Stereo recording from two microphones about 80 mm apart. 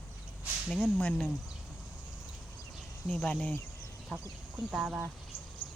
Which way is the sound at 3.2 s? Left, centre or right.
Centre.